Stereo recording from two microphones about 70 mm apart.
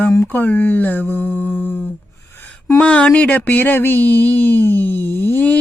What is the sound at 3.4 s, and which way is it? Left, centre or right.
Speech, left.